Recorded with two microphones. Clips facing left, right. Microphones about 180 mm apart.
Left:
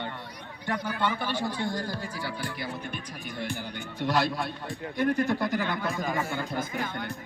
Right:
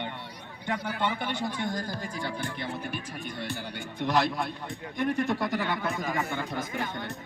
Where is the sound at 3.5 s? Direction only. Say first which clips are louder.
Left 1 dB; 20° right (ahead or behind).